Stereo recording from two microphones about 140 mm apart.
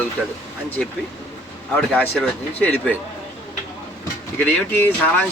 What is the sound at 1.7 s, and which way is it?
Speech, 10° left (ahead or behind).